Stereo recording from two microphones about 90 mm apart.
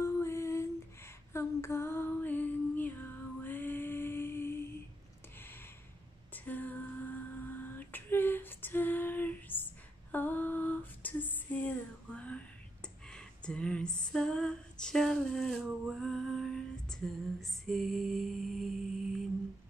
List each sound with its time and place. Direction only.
0.0 s female singing: 30° left (ahead or behind)
6.3 s female singing: 20° left (ahead or behind); by 18.7 s centre (ahead or behind)